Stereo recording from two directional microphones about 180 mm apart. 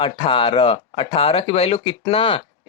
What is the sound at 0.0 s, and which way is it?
Speech, 30° left (ahead or behind).